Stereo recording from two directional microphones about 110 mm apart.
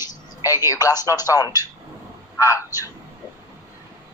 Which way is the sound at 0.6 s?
30° left (ahead or behind).